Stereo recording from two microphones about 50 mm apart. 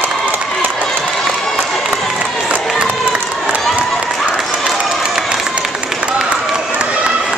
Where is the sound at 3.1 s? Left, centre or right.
Right.